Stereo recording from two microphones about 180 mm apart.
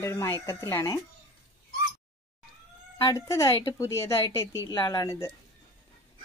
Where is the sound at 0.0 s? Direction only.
15° left (ahead or behind).